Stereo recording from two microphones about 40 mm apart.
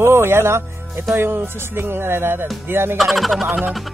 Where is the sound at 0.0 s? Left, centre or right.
Right.